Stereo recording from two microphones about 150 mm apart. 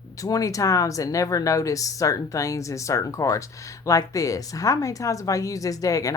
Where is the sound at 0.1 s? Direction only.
25° left (ahead or behind).